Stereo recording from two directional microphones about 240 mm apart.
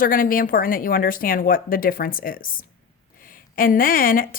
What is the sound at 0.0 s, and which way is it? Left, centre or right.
Speech, left.